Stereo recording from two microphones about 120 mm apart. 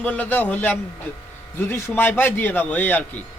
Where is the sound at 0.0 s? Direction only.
10° left (ahead or behind).